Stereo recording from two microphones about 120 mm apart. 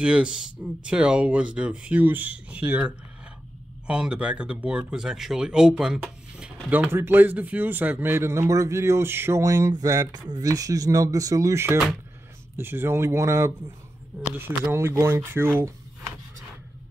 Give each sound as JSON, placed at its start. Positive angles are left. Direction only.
{"t": 0.0, "sound": "speech", "side_deg": -10}